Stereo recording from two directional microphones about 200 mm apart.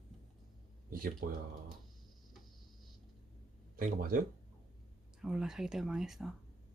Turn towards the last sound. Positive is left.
turn(degrees=0)  # may be behind; listen again after turning